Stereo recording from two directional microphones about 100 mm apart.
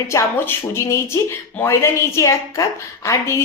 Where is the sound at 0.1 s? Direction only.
25° left (ahead or behind).